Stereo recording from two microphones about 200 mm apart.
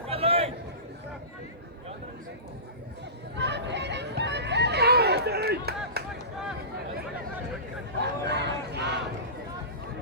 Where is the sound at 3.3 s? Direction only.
60° right (ahead or behind).